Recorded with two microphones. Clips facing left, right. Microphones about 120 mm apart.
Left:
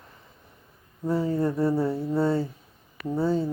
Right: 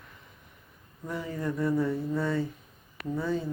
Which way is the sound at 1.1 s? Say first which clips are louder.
Left 8 dB; 30° left (ahead or behind).